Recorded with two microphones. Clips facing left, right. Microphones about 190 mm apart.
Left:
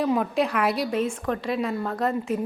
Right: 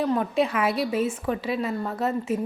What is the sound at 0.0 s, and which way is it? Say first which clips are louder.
A woman's voice: even; centre (ahead or behind).